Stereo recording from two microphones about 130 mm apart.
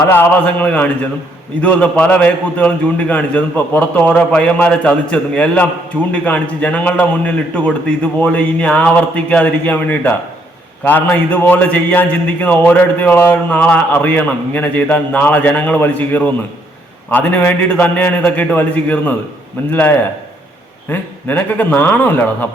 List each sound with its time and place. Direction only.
0.0 s a man's voice: 20° left (ahead or behind)